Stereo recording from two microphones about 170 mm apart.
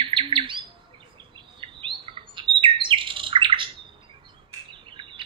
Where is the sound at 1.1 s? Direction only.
30° right (ahead or behind).